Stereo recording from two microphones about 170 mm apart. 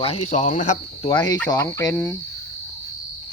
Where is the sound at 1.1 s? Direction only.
25° left (ahead or behind).